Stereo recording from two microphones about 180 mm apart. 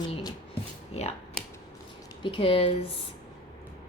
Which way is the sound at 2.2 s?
30° left (ahead or behind).